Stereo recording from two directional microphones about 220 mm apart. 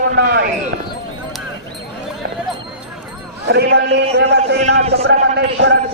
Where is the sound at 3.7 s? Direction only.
50° right (ahead or behind).